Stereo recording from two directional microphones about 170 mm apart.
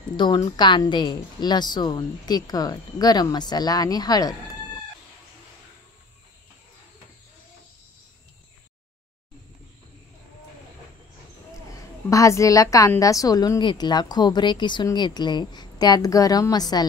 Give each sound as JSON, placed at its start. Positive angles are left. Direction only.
{"t": 0.1, "sound": "a woman's voice", "side_deg": 25}
{"t": 12.1, "sound": "a woman's voice", "side_deg": 20}